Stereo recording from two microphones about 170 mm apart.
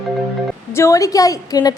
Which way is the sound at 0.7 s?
15° left (ahead or behind).